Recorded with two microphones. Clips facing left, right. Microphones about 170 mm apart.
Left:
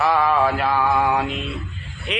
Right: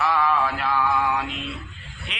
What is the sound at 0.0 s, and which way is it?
Mantra, 40° left (ahead or behind).